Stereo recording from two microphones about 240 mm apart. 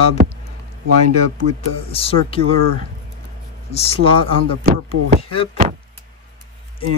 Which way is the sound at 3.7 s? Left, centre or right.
Left.